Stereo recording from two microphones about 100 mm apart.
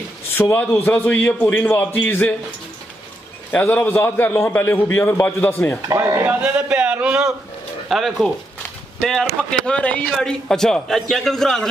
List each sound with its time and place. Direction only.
0.3 s a man's voice: 20° left (ahead or behind)
3.7 s a man's voice: 20° left (ahead or behind)
5.9 s speech: 30° right (ahead or behind)
6.2 s a man's voice: 15° right (ahead or behind); by 11.6 s 5° left (ahead or behind)